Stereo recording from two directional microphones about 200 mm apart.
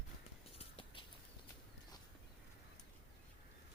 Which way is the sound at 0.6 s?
25° left (ahead or behind).